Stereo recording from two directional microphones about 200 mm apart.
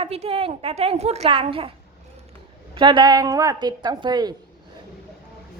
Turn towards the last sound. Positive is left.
turn(degrees=-20)  # may be behind; listen again after turning